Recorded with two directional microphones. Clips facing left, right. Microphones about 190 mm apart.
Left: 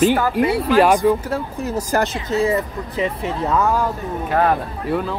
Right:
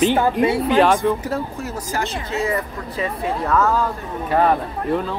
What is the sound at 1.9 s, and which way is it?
Speech, 50° left (ahead or behind).